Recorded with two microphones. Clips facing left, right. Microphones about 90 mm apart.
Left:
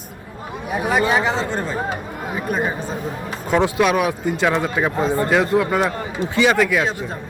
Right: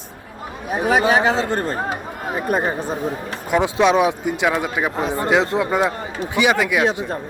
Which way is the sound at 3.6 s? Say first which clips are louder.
Right 3 dB; 20° right (ahead or behind).